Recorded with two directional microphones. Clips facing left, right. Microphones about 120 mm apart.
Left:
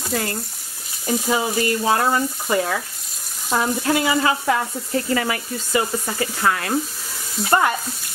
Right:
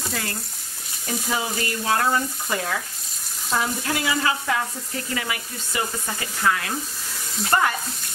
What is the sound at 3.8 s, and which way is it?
Speech, 25° left (ahead or behind).